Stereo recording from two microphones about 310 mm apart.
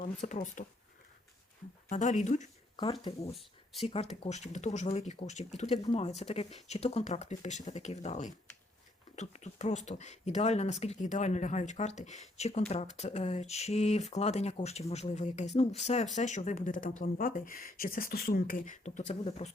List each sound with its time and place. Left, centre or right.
0.0 s speech: left
1.9 s speech: left